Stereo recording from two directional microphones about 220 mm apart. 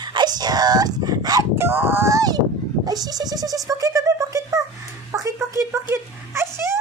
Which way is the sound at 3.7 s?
15° right (ahead or behind).